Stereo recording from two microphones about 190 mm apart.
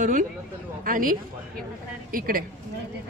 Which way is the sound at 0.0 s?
45° right (ahead or behind).